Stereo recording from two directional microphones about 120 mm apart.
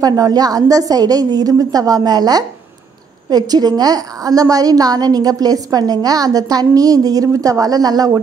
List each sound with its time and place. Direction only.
0.0 s a woman's voice: 30° right (ahead or behind)